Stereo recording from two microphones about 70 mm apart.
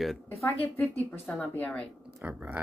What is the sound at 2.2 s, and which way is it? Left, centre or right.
Speech, right.